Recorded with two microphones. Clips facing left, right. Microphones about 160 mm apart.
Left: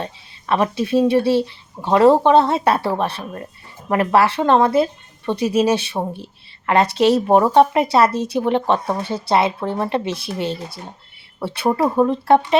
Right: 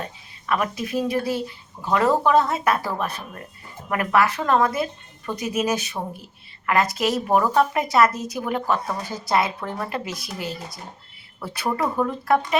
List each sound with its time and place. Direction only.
0.0 s speech: 30° left (ahead or behind)